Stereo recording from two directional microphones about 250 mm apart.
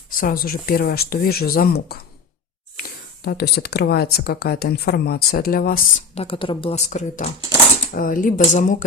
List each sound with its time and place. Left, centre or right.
0.1 s speech: left
2.8 s a sound: left
3.2 s speech: left
6.1 s speech: left